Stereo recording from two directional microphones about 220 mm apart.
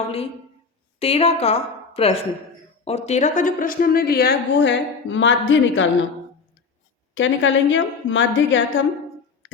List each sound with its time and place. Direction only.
0.9 s a woman's voice: 25° left (ahead or behind); by 5.9 s 60° left (ahead or behind)
7.1 s a woman's voice: 60° left (ahead or behind)